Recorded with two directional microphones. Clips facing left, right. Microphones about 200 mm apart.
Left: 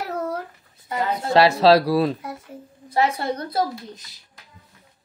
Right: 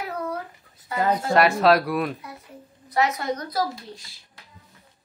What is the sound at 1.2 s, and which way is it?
A woman's voice, 30° left (ahead or behind).